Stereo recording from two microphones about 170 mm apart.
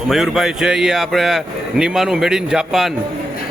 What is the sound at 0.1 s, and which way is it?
A man's voice, centre (ahead or behind).